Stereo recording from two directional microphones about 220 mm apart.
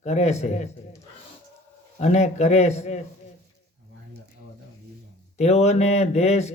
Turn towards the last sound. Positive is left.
turn(degrees=30)  # may be behind; listen again after turning